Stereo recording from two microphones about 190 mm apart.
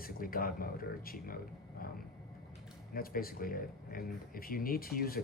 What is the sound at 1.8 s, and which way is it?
Vehicle, 50° left (ahead or behind).